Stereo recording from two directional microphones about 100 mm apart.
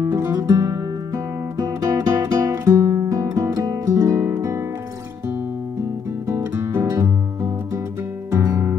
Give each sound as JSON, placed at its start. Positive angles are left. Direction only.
{"t": 0.0, "sound": "guitar", "side_deg": -30}
{"t": 6.2, "sound": "guitar", "side_deg": -25}
{"t": 8.3, "sound": "music", "side_deg": -25}